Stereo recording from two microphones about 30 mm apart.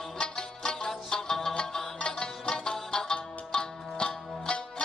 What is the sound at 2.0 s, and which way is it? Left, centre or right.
Music, left.